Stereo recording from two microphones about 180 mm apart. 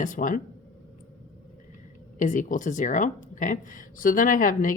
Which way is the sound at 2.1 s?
45° left (ahead or behind).